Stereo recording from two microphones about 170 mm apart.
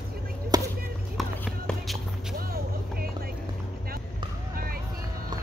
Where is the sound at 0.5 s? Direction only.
20° right (ahead or behind).